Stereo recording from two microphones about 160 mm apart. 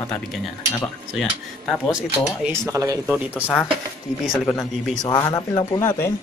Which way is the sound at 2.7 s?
20° right (ahead or behind).